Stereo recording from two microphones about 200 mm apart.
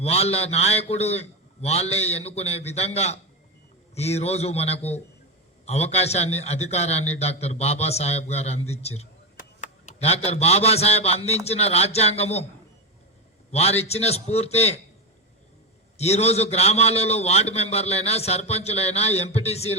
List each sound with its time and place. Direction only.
0.0 s a man's voice: 30° left (ahead or behind)
13.5 s a man's voice: 30° left (ahead or behind)
16.0 s a man's voice: 30° left (ahead or behind)